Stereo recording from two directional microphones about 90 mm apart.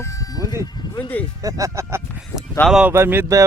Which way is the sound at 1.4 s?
35° right (ahead or behind).